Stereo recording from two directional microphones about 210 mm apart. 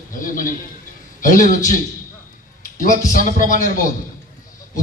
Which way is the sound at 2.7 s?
40° left (ahead or behind).